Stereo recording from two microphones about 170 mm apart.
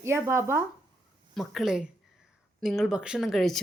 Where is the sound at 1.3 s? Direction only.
Centre (ahead or behind).